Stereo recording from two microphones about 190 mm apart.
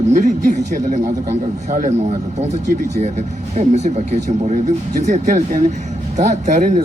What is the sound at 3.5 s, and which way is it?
Speech, 35° right (ahead or behind).